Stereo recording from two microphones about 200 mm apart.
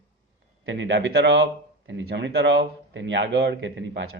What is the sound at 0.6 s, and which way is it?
Speech, 65° right (ahead or behind).